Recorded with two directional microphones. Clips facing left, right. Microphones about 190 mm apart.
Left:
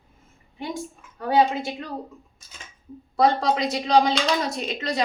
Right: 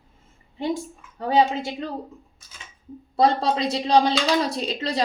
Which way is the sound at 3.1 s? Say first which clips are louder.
Even; 30° right (ahead or behind).